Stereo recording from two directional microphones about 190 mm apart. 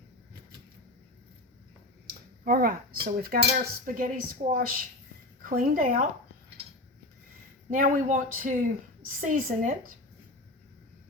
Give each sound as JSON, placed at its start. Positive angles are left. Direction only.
{"t": 2.0, "sound": "a woman's voice", "side_deg": -50}
{"t": 7.7, "sound": "a woman's voice", "side_deg": -45}